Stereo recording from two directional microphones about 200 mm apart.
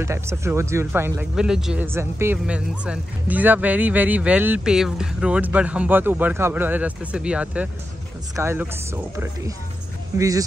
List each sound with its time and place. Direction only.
0.0 s speech: 15° right (ahead or behind)